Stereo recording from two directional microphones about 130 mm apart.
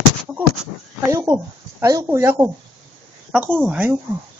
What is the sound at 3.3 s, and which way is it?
Speech, 10° right (ahead or behind).